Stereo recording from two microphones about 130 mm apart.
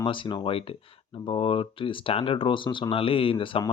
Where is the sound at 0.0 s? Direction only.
40° left (ahead or behind).